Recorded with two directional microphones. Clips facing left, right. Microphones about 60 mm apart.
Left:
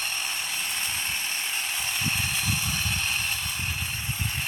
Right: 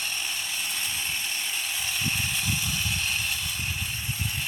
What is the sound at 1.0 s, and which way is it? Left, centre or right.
Ratchet, centre.